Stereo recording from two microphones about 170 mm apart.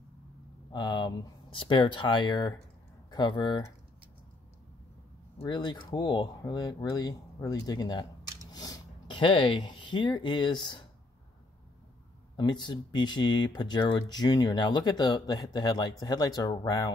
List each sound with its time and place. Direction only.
0.7 s speech: 25° left (ahead or behind)
5.4 s speech: 25° left (ahead or behind)
12.4 s speech: 25° left (ahead or behind)